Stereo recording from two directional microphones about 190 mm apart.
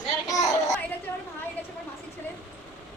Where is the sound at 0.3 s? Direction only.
15° left (ahead or behind).